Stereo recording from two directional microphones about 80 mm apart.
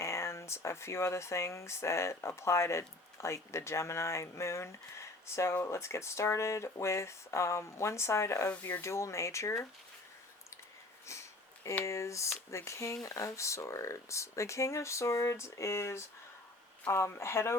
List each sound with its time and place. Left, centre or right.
0.0 s speech: left
11.0 s sniff: left
11.9 s speech: left